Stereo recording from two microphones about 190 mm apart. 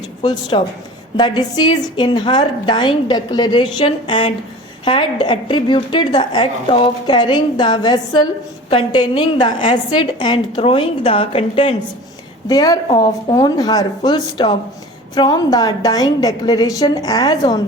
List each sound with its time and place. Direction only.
0.2 s a woman's voice: 20° left (ahead or behind)